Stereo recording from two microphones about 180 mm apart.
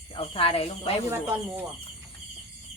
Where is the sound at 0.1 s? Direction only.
30° left (ahead or behind).